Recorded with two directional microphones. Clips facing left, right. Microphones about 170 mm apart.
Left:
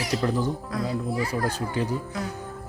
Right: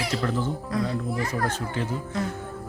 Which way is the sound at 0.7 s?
Centre (ahead or behind).